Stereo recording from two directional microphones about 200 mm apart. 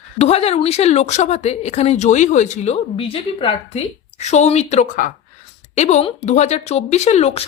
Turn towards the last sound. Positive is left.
turn(degrees=30)  # may be behind; listen again after turning